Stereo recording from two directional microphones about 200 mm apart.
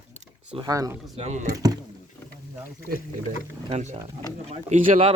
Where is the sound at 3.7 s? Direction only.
35° right (ahead or behind).